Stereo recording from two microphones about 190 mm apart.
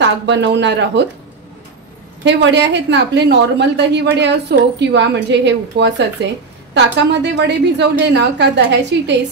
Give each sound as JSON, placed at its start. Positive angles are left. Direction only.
{"t": 0.0, "sound": "speech", "side_deg": -70}
{"t": 2.2, "sound": "a woman's voice", "side_deg": -65}